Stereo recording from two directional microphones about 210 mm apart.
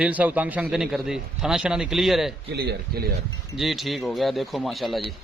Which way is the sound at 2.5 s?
50° right (ahead or behind).